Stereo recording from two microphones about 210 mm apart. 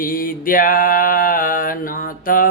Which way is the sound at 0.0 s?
40° left (ahead or behind).